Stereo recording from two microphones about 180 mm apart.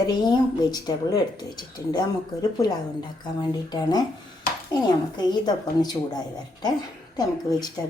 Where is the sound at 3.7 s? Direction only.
25° left (ahead or behind).